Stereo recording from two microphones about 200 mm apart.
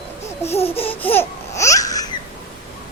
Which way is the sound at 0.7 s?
30° left (ahead or behind).